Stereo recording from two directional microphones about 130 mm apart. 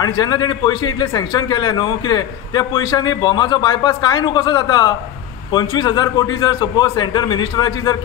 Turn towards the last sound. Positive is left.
turn(degrees=35)  # may be behind; listen again after turning